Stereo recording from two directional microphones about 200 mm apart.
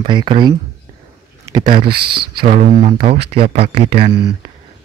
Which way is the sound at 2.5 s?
35° right (ahead or behind).